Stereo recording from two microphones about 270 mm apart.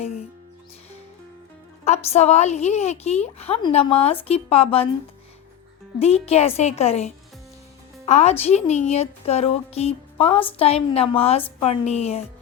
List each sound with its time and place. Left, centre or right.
1.8 s a woman's voice: left
6.0 s a woman's voice: left